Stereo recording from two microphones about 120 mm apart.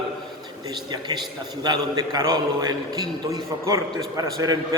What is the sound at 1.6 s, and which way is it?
A man's voice, 35° right (ahead or behind).